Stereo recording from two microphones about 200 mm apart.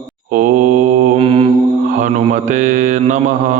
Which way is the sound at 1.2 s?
30° right (ahead or behind).